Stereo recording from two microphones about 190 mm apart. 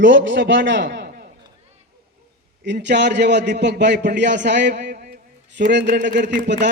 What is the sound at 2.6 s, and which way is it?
A man's voice, 65° right (ahead or behind).